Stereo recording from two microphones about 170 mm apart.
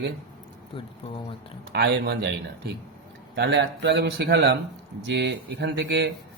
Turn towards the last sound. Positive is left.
turn(degrees=-90)